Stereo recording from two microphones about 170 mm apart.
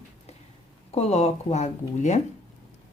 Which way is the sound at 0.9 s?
40° left (ahead or behind).